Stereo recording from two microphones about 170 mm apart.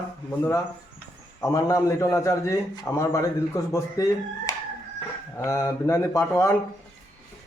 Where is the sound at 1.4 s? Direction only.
20° left (ahead or behind).